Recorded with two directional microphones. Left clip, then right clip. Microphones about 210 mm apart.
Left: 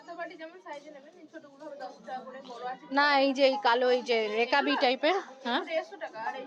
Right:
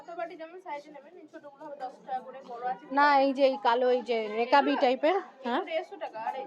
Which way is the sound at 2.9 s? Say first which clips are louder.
Right 1 dB; 5° right (ahead or behind).